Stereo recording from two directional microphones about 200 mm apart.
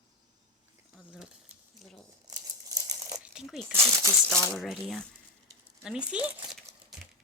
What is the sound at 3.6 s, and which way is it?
Speech, 15° right (ahead or behind).